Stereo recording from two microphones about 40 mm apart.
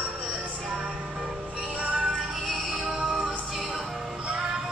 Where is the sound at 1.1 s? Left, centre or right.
Centre.